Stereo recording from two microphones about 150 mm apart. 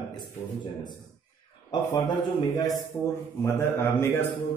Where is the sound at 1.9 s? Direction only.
30° left (ahead or behind).